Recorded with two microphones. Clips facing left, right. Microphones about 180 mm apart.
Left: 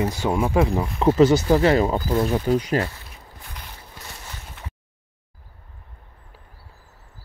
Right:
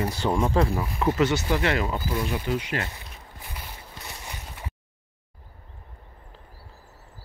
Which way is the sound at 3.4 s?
10° right (ahead or behind).